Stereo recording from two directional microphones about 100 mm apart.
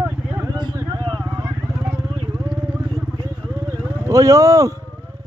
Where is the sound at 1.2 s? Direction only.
15° right (ahead or behind).